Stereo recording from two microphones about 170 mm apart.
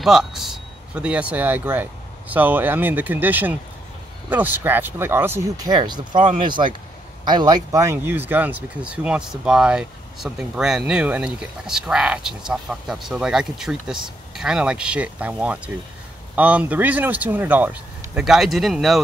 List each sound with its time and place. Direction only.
0.0 s a man's voice: centre (ahead or behind)